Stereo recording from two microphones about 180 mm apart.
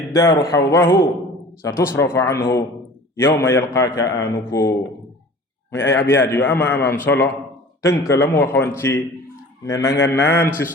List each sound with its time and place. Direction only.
0.1 s a man's voice: 20° left (ahead or behind)
6.1 s a man's voice: 10° left (ahead or behind)